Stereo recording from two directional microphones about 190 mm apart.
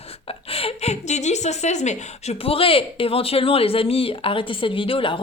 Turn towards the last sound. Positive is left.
turn(degrees=30)  # may be behind; listen again after turning